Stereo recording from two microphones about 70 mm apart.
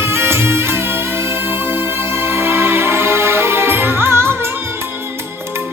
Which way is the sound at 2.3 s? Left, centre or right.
Right.